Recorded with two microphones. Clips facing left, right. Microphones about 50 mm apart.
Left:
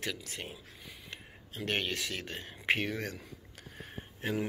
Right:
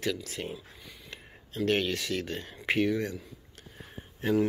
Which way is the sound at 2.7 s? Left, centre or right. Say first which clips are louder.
Right 5 dB; left.